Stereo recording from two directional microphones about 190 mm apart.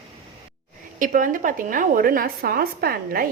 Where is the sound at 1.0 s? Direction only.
45° right (ahead or behind).